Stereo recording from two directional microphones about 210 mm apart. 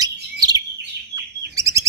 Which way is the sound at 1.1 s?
15° right (ahead or behind).